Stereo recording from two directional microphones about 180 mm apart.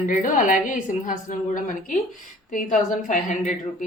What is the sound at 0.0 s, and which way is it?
A woman's voice, 45° left (ahead or behind).